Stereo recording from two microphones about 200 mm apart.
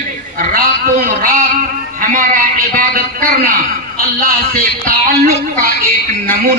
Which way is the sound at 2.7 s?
45° right (ahead or behind).